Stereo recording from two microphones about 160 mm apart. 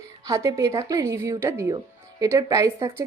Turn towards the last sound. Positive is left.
turn(degrees=-15)  # may be behind; listen again after turning